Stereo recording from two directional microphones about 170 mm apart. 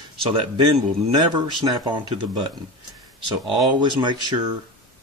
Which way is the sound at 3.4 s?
25° right (ahead or behind).